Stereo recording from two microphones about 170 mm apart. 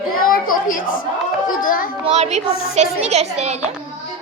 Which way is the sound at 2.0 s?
40° right (ahead or behind).